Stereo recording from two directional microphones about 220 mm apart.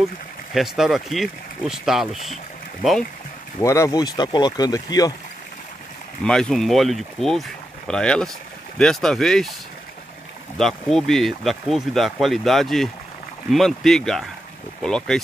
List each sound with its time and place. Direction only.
0.6 s speech: centre (ahead or behind)
3.5 s speech: 15° left (ahead or behind)
6.2 s speech: 5° left (ahead or behind)
10.6 s speech: centre (ahead or behind)